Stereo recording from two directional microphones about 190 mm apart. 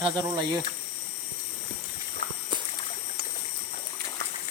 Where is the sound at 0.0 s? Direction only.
25° right (ahead or behind).